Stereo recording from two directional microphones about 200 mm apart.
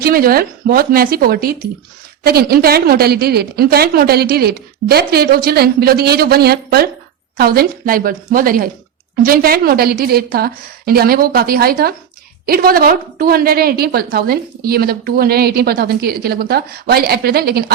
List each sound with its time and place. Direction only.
0.0 s a woman's voice: 45° right (ahead or behind)